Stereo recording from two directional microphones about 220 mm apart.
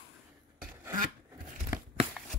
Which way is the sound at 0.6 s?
10° right (ahead or behind).